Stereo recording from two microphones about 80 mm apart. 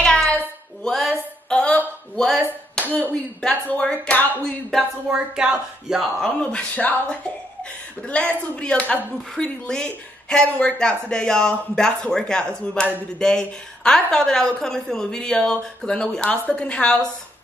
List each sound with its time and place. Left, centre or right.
0.0 s a sound: centre
2.1 s speech: centre
2.9 s a woman's voice: left
4.7 s a woman's voice: centre